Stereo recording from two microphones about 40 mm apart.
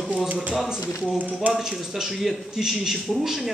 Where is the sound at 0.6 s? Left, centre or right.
Centre.